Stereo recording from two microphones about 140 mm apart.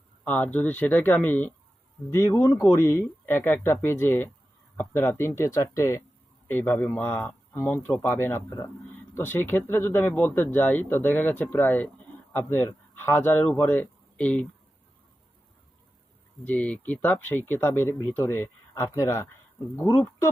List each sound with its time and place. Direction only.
0.3 s speech: 10° left (ahead or behind)
16.4 s speech: 10° left (ahead or behind)